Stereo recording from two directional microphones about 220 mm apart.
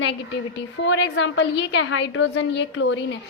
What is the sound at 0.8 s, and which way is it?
A woman's voice, 60° left (ahead or behind).